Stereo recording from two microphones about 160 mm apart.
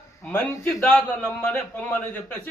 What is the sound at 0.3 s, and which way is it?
Speech, 15° left (ahead or behind).